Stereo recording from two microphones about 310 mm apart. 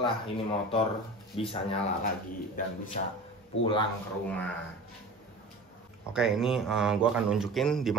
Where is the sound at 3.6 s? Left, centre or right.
Centre.